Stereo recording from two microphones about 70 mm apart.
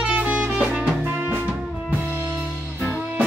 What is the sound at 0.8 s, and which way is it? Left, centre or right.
Music, right.